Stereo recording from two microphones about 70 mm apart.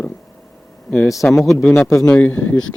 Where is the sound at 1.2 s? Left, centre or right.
Centre.